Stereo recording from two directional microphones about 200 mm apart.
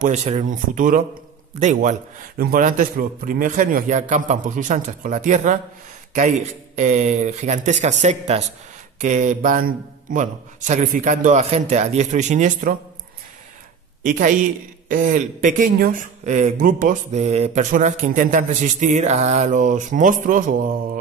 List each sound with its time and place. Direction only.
0.0 s speech: 35° right (ahead or behind)
14.0 s speech: 40° right (ahead or behind)